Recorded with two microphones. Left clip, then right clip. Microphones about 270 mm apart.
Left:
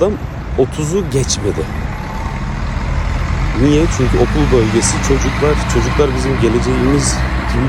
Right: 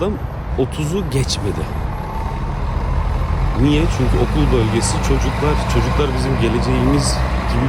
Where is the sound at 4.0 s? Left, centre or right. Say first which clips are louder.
Left 5 dB; right.